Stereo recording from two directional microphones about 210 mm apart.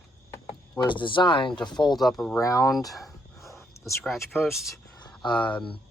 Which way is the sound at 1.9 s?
Centre (ahead or behind).